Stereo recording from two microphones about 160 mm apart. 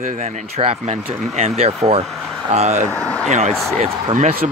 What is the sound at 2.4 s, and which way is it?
Speech, 45° right (ahead or behind).